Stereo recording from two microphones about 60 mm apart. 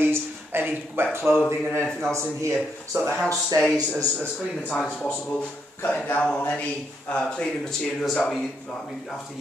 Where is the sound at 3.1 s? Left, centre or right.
Centre.